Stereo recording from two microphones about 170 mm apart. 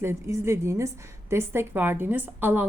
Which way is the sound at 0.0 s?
15° right (ahead or behind).